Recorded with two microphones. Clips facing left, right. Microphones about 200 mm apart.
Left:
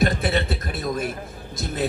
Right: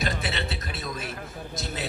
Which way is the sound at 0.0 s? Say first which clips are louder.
Left 8 dB; 55° left (ahead or behind).